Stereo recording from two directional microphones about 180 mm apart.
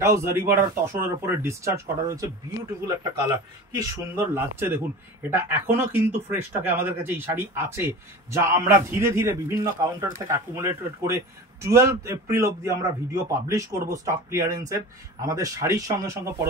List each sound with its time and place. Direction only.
0.0 s a man's voice: 15° right (ahead or behind)